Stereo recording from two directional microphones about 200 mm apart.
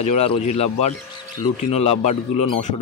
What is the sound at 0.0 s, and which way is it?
Speech, 30° left (ahead or behind).